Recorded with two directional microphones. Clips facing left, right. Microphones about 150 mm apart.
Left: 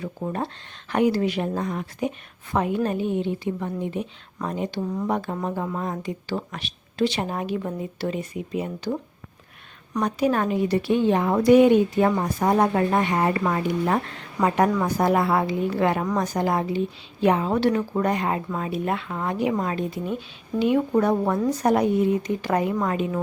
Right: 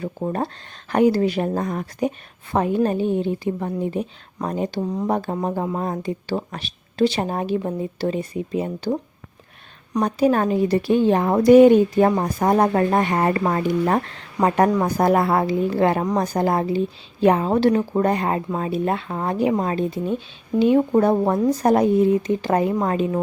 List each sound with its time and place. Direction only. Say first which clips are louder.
0.0 s a woman's voice: right 4 dB; 40° right (ahead or behind)